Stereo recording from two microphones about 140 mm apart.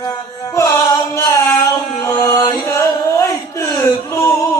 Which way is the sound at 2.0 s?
20° left (ahead or behind).